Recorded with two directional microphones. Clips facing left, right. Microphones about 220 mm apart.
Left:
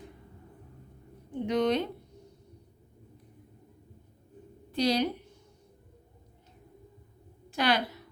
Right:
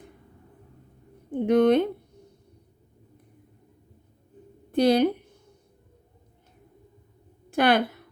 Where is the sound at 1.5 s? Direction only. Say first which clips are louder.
Right 8 dB; 55° right (ahead or behind).